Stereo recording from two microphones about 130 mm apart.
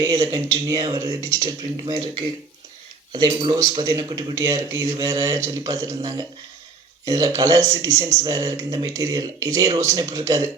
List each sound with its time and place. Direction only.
0.0 s speech: 30° right (ahead or behind)
3.1 s speech: 35° right (ahead or behind)